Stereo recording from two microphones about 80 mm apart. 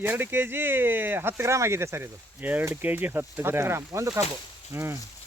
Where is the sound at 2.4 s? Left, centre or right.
Right.